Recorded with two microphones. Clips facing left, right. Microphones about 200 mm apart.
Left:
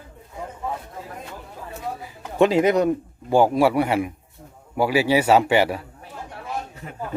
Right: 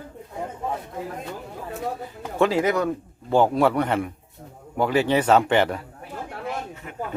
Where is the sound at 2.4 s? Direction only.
20° left (ahead or behind).